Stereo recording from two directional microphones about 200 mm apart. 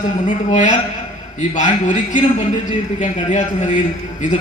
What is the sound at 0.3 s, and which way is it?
A man's voice, 40° left (ahead or behind).